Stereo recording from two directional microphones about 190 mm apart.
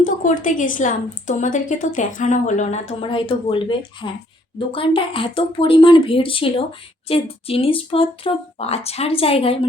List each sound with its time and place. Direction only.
0.0 s a woman's voice: 45° left (ahead or behind)